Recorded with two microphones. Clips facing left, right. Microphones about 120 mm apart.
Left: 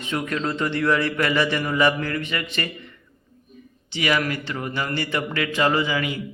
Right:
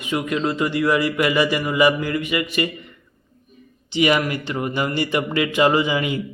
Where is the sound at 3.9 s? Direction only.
20° right (ahead or behind).